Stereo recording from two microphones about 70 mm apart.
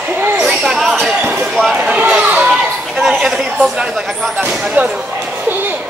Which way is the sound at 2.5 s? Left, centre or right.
Centre.